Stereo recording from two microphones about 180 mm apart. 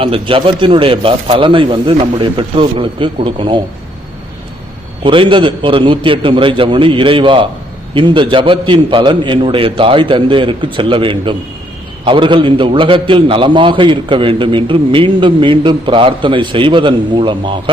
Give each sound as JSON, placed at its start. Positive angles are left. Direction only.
{"t": 0.0, "sound": "a man's voice", "side_deg": -30}
{"t": 5.0, "sound": "a man's voice", "side_deg": -30}